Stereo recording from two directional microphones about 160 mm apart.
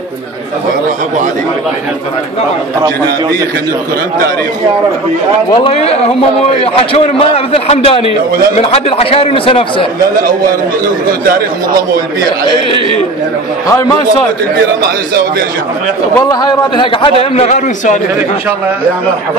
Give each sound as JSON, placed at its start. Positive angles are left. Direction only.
{"t": 5.5, "sound": "a man's voice", "side_deg": 35}
{"t": 10.1, "sound": "a man's voice", "side_deg": -60}
{"t": 16.3, "sound": "a man's voice", "side_deg": 25}
{"t": 17.2, "sound": "a man's voice", "side_deg": 45}